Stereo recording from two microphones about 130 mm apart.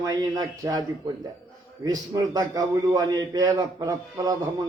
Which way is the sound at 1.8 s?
30° right (ahead or behind).